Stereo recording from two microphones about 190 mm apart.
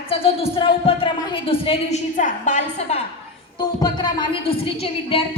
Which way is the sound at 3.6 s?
20° left (ahead or behind).